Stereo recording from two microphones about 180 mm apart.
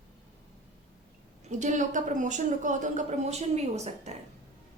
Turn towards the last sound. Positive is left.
turn(degrees=-40)  # may be behind; listen again after turning